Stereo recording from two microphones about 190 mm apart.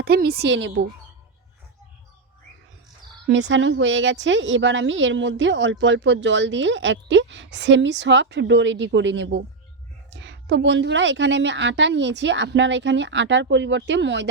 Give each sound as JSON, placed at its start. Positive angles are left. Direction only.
{"t": 0.0, "sound": "a woman's voice", "side_deg": -55}
{"t": 3.3, "sound": "a woman's voice", "side_deg": -70}